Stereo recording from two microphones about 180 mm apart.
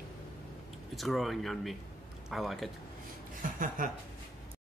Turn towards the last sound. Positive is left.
turn(degrees=-50)  # may be behind; listen again after turning